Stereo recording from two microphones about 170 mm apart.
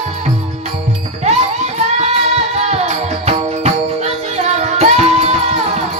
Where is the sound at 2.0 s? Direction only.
40° right (ahead or behind).